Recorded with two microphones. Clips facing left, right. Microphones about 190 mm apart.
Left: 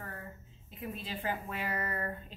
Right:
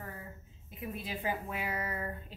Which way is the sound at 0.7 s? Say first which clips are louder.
Right 1 dB; 10° right (ahead or behind).